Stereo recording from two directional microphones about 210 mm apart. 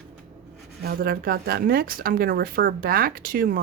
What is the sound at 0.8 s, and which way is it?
Speech, 45° right (ahead or behind).